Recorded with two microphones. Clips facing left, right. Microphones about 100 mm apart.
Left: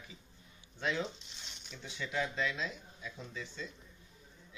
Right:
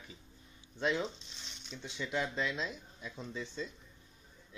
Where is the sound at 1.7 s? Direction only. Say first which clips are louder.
Right 2 dB; 25° right (ahead or behind).